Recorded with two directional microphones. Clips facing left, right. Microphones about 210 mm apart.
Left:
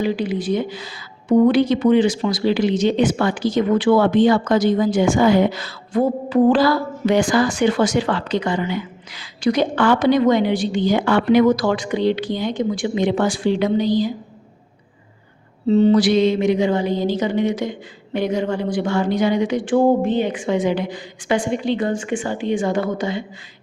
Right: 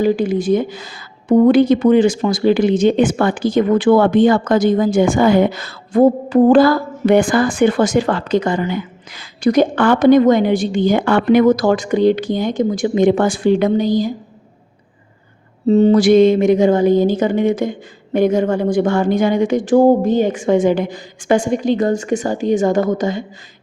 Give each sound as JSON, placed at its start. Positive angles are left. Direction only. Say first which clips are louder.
{"t": 0.0, "sound": "a woman's voice", "louder": "right 6 dB", "side_deg": -45}
{"t": 15.6, "sound": "a woman's voice", "louder": "right 3 dB", "side_deg": -45}